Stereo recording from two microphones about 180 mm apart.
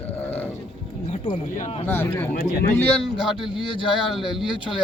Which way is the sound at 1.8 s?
10° left (ahead or behind).